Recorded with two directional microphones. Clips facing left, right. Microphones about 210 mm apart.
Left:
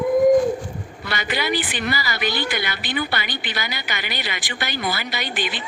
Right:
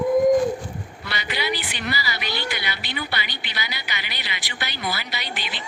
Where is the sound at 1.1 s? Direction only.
50° left (ahead or behind).